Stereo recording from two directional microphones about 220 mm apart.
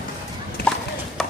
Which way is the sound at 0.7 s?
5° left (ahead or behind).